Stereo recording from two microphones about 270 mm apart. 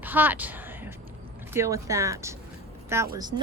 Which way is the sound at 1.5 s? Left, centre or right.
Centre.